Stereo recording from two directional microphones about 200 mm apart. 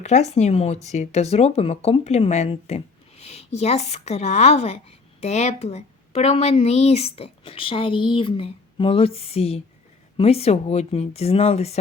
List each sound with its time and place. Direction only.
0.0 s speech: 35° left (ahead or behind)